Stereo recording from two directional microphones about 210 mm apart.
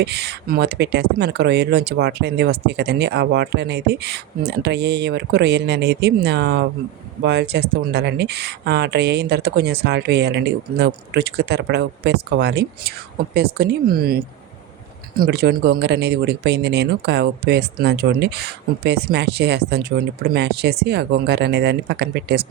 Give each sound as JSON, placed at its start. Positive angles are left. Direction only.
{"t": 0.0, "sound": "speech", "side_deg": -50}